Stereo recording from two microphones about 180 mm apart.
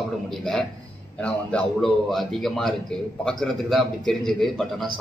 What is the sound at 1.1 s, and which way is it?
A man's voice, 5° left (ahead or behind).